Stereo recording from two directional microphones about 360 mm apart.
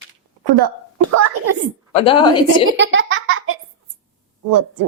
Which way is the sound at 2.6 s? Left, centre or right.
Right.